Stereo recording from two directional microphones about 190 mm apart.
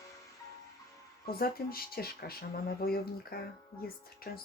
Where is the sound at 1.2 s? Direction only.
50° left (ahead or behind).